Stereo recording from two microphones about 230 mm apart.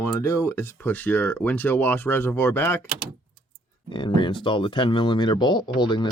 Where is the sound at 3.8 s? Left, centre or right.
Left.